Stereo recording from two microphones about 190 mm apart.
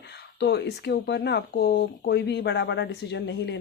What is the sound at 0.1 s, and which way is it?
Speech, 60° left (ahead or behind).